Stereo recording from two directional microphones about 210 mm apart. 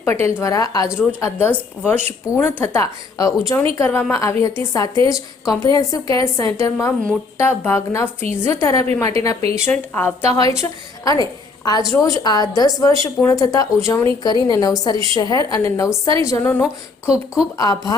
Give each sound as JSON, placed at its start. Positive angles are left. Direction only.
{"t": 0.0, "sound": "a woman's voice", "side_deg": 10}
{"t": 17.1, "sound": "speech", "side_deg": -5}
{"t": 17.6, "sound": "a woman's voice", "side_deg": 20}